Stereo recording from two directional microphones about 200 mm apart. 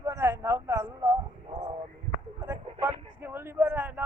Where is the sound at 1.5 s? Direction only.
30° right (ahead or behind).